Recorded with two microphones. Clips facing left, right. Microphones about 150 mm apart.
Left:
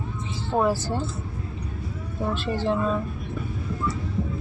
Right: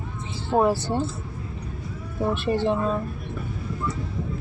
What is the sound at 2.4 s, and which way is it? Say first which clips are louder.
Speech: right 1 dB; 15° right (ahead or behind).